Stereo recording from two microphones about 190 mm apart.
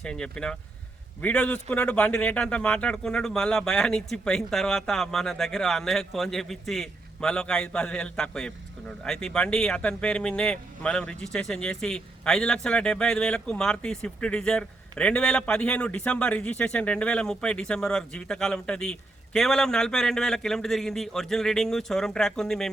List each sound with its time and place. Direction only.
0.0 s a man's voice: 5° left (ahead or behind)